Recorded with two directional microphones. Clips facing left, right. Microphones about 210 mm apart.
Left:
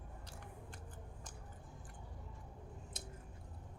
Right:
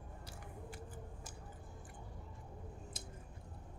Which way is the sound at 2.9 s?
Centre (ahead or behind).